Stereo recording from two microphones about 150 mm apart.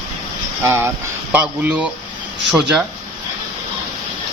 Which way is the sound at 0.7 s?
15° right (ahead or behind).